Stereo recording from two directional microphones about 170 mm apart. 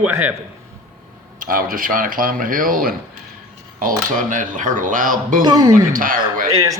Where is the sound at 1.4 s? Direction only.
55° right (ahead or behind).